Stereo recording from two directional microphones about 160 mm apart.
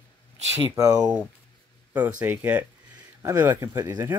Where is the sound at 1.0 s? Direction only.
10° right (ahead or behind).